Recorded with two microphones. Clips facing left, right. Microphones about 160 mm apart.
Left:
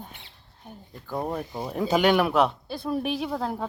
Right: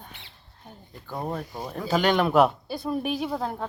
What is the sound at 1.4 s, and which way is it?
Speech, 25° left (ahead or behind).